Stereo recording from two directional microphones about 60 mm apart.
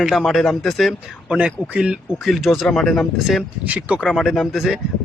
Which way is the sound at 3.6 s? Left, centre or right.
Right.